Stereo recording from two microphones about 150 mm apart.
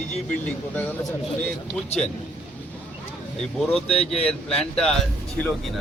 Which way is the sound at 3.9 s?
45° left (ahead or behind).